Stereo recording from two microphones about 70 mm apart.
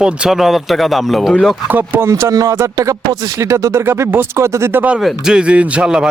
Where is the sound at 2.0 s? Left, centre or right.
Right.